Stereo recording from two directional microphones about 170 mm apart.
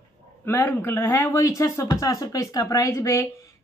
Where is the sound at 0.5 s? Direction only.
10° left (ahead or behind).